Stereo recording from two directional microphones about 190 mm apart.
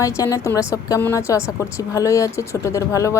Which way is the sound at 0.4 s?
15° left (ahead or behind).